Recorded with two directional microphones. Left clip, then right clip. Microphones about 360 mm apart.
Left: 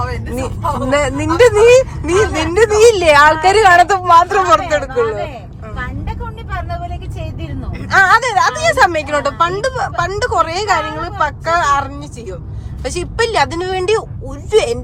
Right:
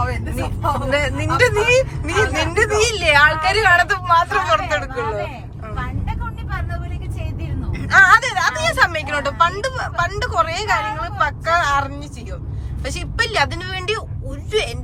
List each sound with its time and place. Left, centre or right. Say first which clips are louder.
0.9 s speech: left 7 dB; centre
7.8 s speech: left 1 dB; centre